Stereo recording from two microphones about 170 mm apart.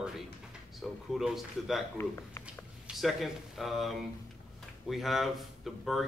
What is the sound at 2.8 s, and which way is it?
A man's voice, centre (ahead or behind).